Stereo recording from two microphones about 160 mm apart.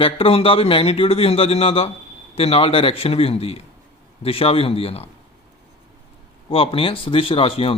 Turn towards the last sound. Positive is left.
turn(degrees=35)  # may be behind; listen again after turning